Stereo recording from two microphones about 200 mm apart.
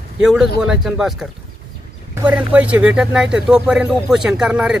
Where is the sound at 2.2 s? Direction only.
5° right (ahead or behind).